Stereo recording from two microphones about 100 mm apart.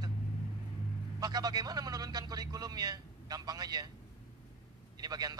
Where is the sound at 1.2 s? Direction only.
40° right (ahead or behind).